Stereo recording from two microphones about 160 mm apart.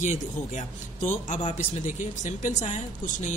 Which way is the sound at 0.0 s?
50° left (ahead or behind).